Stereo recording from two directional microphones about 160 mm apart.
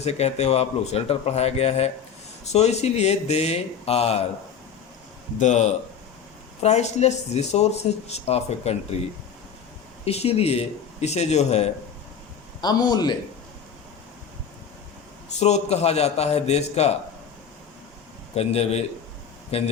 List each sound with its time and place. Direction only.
0.0 s speech: 40° left (ahead or behind)
5.4 s speech: 45° left (ahead or behind)
10.1 s speech: 40° left (ahead or behind)
12.6 s a man's voice: 25° left (ahead or behind)
15.4 s speech: 45° left (ahead or behind)
18.3 s speech: 40° left (ahead or behind)